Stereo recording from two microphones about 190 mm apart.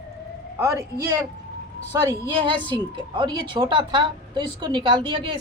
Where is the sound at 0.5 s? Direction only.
15° right (ahead or behind).